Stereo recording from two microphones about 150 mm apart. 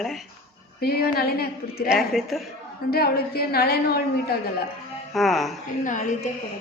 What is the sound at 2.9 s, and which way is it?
A woman's voice, 90° left.